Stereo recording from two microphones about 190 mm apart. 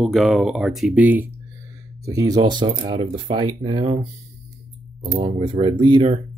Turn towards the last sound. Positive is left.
turn(degrees=-25)  # may be behind; listen again after turning